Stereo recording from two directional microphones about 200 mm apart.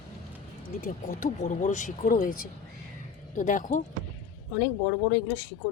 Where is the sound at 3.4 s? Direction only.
40° left (ahead or behind).